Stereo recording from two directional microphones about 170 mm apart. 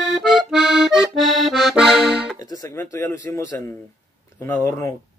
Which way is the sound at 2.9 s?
15° left (ahead or behind).